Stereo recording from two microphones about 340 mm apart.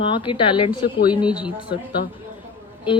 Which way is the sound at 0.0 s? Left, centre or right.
Centre.